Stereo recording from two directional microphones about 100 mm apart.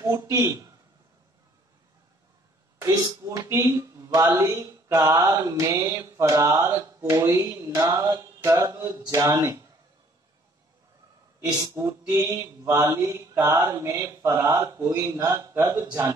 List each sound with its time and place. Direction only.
0.0 s mantra: 30° right (ahead or behind)
2.8 s mantra: 35° right (ahead or behind)
11.7 s mantra: 30° right (ahead or behind)